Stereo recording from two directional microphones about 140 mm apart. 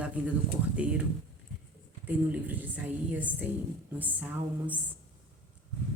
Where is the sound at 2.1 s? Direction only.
10° right (ahead or behind).